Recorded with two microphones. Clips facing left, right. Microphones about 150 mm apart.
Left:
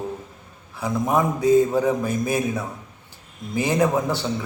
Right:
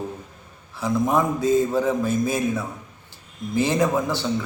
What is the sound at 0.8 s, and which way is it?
Speech, 15° left (ahead or behind).